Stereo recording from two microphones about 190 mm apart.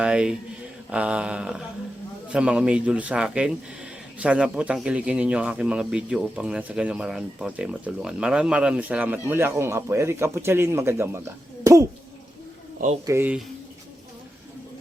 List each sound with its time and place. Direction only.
0.0 s a man's voice: 5° right (ahead or behind)
13.1 s a man's voice: 10° right (ahead or behind)